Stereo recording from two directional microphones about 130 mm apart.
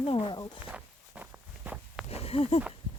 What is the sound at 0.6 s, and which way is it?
Walk, 10° right (ahead or behind).